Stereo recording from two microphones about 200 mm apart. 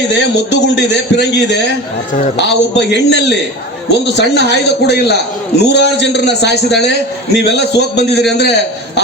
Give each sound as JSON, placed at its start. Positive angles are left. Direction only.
{"t": 0.1, "sound": "a man's voice", "side_deg": 60}